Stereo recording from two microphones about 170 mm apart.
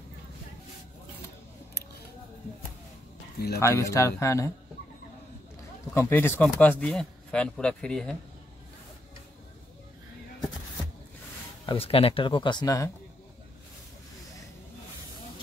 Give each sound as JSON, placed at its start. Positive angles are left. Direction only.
{"t": 3.5, "sound": "speech", "side_deg": 15}
{"t": 5.9, "sound": "speech", "side_deg": 15}
{"t": 11.6, "sound": "speech", "side_deg": 35}